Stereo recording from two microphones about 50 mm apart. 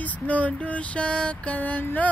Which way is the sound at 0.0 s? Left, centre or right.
Left.